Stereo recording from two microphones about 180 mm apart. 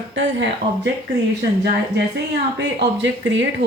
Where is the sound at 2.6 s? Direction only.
75° right (ahead or behind).